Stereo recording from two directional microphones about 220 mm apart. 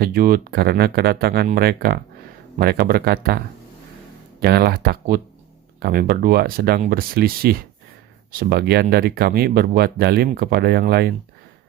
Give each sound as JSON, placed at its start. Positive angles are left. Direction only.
{"t": 0.0, "sound": "speech", "side_deg": -40}